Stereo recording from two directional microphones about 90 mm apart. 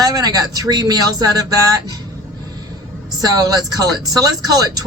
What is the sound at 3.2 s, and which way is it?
Speech, 45° right (ahead or behind).